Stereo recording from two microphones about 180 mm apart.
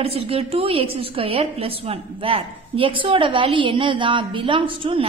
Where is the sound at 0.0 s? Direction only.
35° right (ahead or behind).